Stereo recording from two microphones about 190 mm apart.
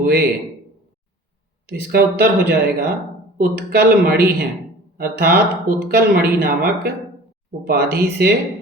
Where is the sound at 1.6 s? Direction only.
55° right (ahead or behind).